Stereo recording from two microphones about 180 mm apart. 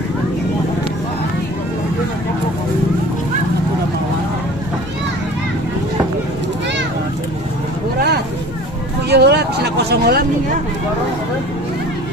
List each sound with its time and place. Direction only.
9.1 s vehicle: 65° right (ahead or behind)